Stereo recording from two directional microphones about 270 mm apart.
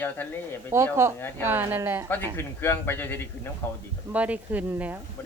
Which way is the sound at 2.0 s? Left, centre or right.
Centre.